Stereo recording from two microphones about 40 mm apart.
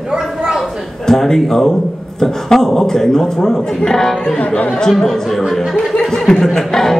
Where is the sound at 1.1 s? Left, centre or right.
Centre.